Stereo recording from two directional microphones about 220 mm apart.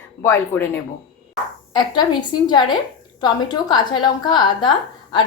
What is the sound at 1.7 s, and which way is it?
Speech, 20° left (ahead or behind).